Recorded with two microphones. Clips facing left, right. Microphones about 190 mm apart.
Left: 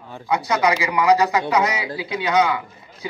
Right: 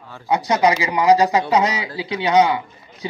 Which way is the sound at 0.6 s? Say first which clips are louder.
Right 2 dB; 25° right (ahead or behind).